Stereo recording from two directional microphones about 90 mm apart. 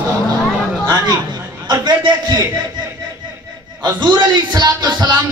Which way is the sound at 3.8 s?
50° right (ahead or behind).